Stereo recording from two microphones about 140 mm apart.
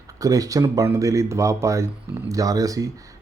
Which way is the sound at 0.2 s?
25° right (ahead or behind).